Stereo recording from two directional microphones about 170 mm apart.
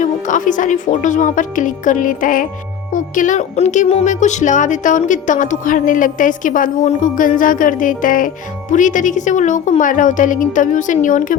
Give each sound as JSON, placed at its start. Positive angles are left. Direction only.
{"t": 0.0, "sound": "speech", "side_deg": 50}